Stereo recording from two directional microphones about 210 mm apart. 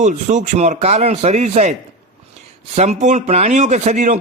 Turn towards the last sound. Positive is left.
turn(degrees=-35)  # may be behind; listen again after turning